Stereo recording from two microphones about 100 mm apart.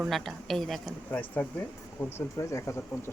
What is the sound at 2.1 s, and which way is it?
Speech, 30° left (ahead or behind).